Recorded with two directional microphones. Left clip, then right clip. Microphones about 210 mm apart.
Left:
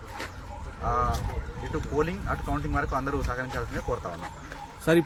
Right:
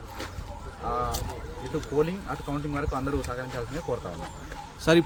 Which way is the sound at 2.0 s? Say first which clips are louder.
Right 1 dB; 10° right (ahead or behind).